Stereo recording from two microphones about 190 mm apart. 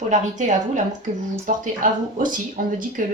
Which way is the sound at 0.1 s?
40° right (ahead or behind).